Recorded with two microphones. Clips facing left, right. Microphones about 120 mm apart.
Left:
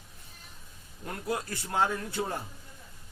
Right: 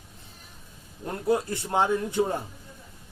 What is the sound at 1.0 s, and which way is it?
A man's voice, 25° right (ahead or behind).